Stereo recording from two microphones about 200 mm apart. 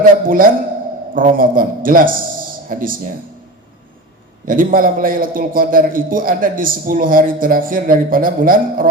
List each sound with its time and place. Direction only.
0.0 s a man's voice: 45° right (ahead or behind)
4.4 s a man's voice: 45° right (ahead or behind)